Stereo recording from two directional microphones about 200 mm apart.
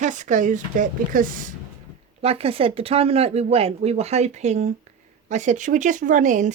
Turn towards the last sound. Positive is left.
turn(degrees=-40)  # may be behind; listen again after turning